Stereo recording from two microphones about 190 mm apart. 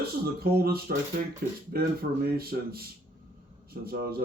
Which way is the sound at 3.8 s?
55° right (ahead or behind).